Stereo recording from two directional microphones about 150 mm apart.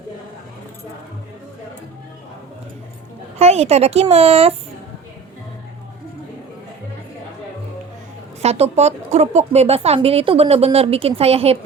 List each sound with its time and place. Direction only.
3.3 s a woman's voice: 45° right (ahead or behind)
8.4 s speech: 45° right (ahead or behind)